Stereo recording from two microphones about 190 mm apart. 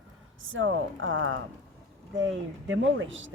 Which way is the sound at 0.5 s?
90° right.